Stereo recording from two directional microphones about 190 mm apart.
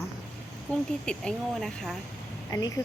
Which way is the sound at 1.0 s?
5° left (ahead or behind).